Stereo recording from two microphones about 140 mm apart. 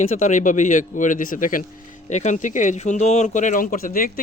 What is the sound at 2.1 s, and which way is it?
Speech, 60° left (ahead or behind).